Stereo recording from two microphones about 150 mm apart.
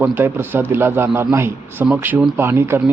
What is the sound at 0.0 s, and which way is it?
Speech, 15° right (ahead or behind).